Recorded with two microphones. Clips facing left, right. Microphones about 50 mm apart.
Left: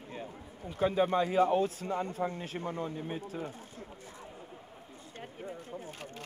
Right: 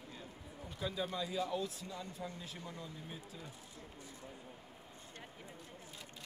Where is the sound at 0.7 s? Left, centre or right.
Left.